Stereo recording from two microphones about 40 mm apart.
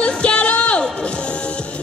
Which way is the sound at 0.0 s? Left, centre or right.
Left.